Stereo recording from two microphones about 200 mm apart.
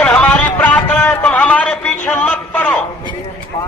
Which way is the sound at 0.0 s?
10° left (ahead or behind).